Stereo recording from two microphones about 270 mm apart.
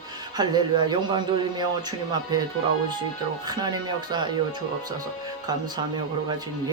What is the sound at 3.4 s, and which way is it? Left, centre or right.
Speech, centre.